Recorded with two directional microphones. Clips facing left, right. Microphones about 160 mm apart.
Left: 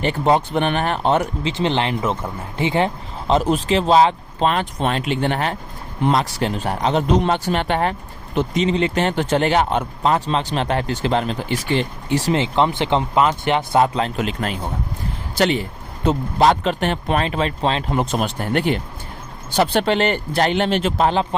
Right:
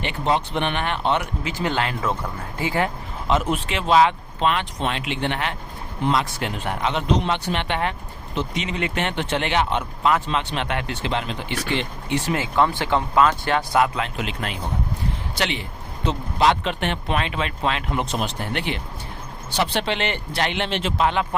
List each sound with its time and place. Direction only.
0.0 s speech: 40° left (ahead or behind)
1.5 s speech: 25° left (ahead or behind)
12.3 s speech: 25° left (ahead or behind)
14.2 s speech: 40° left (ahead or behind)
18.0 s speech: 50° left (ahead or behind)